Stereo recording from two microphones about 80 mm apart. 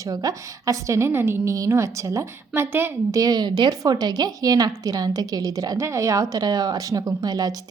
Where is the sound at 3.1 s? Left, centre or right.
Right.